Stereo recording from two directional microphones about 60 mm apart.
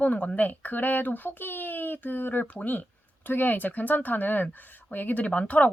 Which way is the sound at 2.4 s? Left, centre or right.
Left.